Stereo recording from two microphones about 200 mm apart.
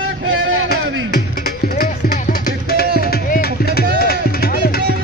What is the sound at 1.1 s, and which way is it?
Music, 50° left (ahead or behind).